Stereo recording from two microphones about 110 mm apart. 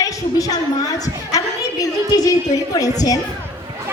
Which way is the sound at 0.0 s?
35° left (ahead or behind).